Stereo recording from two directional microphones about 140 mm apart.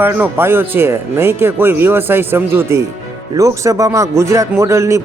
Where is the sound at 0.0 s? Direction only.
15° right (ahead or behind).